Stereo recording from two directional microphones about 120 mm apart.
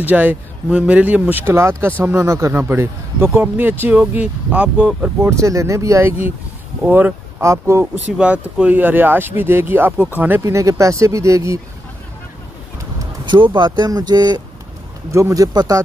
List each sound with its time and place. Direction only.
0.0 s speech: 15° right (ahead or behind)
5.3 s speech: 25° right (ahead or behind)
8.2 s speech: 10° right (ahead or behind)
10.4 s speech: 25° right (ahead or behind)
13.0 s speech: 40° right (ahead or behind)